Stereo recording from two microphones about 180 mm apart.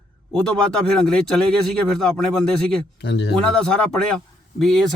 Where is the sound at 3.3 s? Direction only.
5° left (ahead or behind).